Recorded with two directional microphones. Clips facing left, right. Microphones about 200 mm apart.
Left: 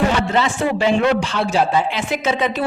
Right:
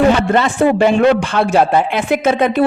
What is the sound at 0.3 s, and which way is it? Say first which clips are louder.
A man's voice: right 6 dB; 55° right (ahead or behind).